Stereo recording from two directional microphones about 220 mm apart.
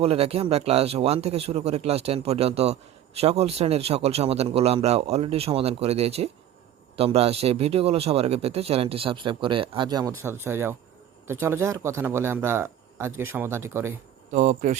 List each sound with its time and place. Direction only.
0.0 s a man's voice: 25° right (ahead or behind); by 13.9 s 10° right (ahead or behind)
14.3 s speech: 35° right (ahead or behind)